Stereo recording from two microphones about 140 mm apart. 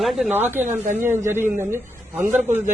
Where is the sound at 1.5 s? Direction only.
20° right (ahead or behind).